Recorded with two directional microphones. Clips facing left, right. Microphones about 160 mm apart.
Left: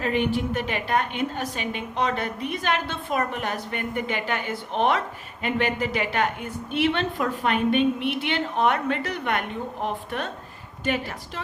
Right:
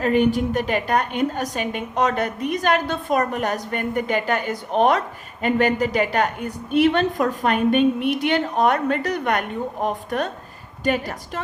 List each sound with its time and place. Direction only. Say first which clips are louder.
0.0 s a woman's voice: right 6 dB; 45° right (ahead or behind)